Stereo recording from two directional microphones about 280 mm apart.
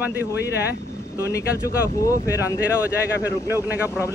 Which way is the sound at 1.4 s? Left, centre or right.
Centre.